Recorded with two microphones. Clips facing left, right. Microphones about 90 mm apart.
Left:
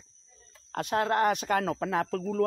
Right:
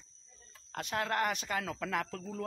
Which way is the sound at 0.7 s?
35° left (ahead or behind).